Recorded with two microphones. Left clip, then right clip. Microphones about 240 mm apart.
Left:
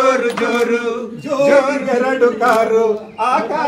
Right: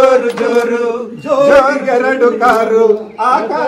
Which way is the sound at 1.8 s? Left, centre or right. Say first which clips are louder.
Right 3 dB; right.